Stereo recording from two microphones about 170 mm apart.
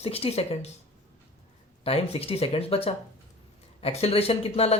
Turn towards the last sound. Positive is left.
turn(degrees=35)  # may be behind; listen again after turning